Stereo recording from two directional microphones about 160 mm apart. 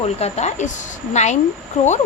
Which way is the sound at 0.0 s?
40° left (ahead or behind).